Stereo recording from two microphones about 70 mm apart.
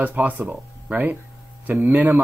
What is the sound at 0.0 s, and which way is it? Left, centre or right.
Speech, right.